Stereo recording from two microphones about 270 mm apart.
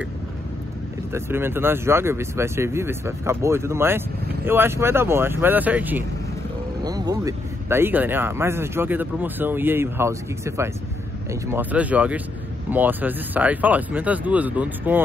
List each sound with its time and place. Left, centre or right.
1.1 s speech: centre